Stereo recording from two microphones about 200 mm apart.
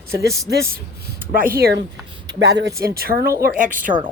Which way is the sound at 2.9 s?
50° right (ahead or behind).